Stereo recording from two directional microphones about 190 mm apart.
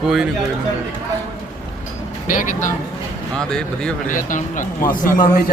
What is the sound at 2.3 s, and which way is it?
Speech, 45° left (ahead or behind).